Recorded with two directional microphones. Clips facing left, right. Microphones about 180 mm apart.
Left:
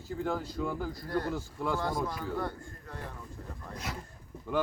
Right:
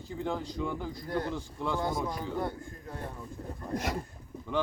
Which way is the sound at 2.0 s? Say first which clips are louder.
Right 1 dB; 20° right (ahead or behind).